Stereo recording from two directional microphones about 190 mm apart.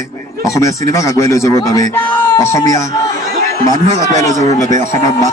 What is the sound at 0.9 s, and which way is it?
A man's voice, 15° left (ahead or behind).